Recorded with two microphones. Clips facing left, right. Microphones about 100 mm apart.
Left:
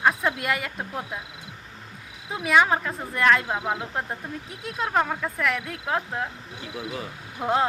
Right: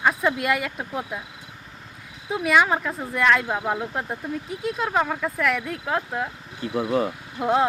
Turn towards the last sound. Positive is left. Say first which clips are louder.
# right 3 dB
turn(degrees=0)  # may be behind; listen again after turning